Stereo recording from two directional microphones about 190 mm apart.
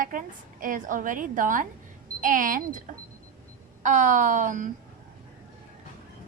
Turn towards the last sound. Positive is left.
turn(degrees=-40)  # may be behind; listen again after turning